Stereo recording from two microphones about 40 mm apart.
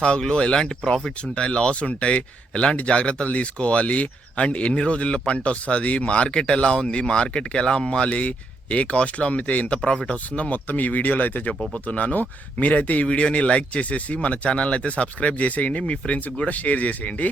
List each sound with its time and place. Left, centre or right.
0.0 s speech: left
1.4 s speech: left
9.7 s speech: left
10.7 s speech: left